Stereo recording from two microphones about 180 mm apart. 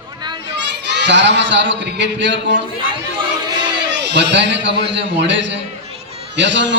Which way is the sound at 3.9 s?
75° right (ahead or behind).